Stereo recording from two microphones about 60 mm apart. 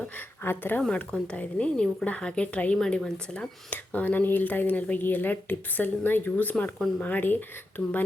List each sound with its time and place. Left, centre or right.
0.4 s speech: left
0.8 s speech: centre
2.7 s speech: centre
3.7 s speech: left